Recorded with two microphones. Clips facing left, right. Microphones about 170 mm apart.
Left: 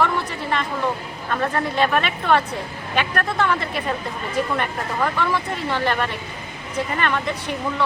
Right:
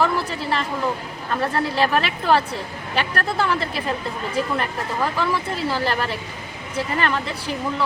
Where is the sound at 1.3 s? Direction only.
35° right (ahead or behind).